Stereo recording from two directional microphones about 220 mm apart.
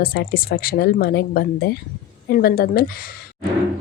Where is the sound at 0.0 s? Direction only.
45° left (ahead or behind).